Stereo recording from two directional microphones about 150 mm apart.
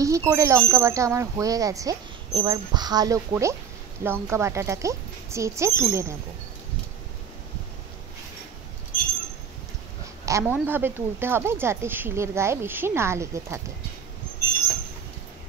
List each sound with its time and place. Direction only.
0.0 s speech: 20° right (ahead or behind)
10.2 s a woman's voice: 15° right (ahead or behind)